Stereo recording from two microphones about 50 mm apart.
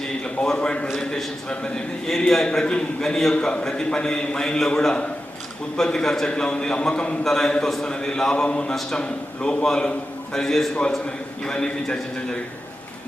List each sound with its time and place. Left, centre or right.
0.4 s a man's voice: centre